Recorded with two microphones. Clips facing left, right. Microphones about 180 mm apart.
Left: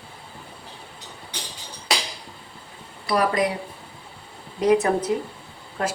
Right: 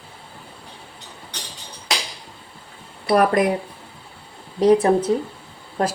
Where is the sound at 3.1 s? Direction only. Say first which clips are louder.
Right 5 dB; 55° right (ahead or behind).